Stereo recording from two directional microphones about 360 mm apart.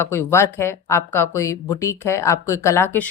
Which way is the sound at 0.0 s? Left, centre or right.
Centre.